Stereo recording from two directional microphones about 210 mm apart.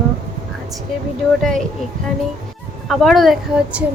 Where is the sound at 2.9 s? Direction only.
Centre (ahead or behind).